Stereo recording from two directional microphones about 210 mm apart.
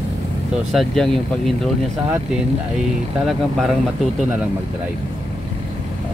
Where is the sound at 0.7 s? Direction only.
Centre (ahead or behind).